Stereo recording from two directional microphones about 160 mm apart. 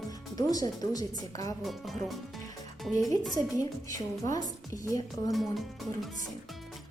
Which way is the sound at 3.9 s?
20° left (ahead or behind).